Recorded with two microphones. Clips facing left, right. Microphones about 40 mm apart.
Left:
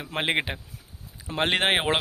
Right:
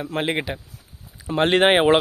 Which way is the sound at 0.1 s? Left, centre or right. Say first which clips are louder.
Even; left.